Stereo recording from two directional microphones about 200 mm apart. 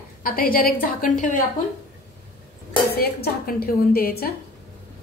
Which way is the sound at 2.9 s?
50° left (ahead or behind).